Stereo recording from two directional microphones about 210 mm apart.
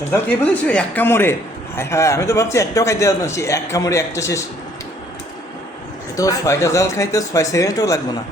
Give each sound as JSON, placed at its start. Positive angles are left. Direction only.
{"t": 0.1, "sound": "a man's voice", "side_deg": 5}
{"t": 6.1, "sound": "a man's voice", "side_deg": 15}